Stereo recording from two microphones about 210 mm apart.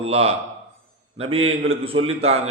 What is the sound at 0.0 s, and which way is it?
A man's voice, 30° right (ahead or behind).